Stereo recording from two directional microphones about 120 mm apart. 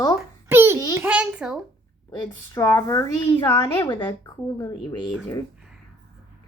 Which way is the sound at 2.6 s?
30° left (ahead or behind).